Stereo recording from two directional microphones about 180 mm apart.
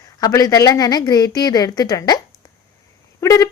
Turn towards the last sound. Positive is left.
turn(degrees=20)  # may be behind; listen again after turning